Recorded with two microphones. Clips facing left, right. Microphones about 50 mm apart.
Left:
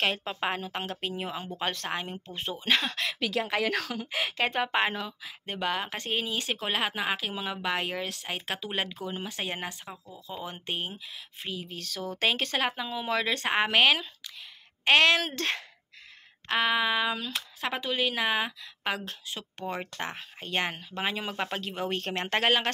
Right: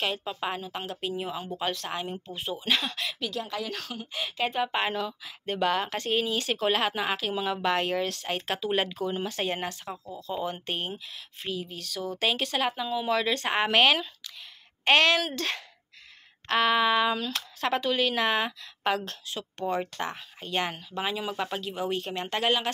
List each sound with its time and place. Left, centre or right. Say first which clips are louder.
0.0 s speech: left 1 dB; left
0.7 s speech: even; left
3.2 s speech: left 7 dB; left
4.4 s speech: right 1 dB; left
4.7 s speech: left 1 dB; left
11.7 s speech: right 2 dB; left
13.6 s speech: right 1 dB; centre
15.0 s speech: even; left
16.4 s speech: right 3 dB; centre
18.9 s speech: right 3 dB; left
21.5 s speech: right 1 dB; left